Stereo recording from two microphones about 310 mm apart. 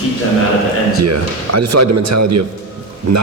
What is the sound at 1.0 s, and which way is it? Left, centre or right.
A man's voice, right.